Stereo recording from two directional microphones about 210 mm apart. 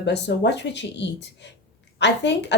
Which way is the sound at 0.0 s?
55° left (ahead or behind).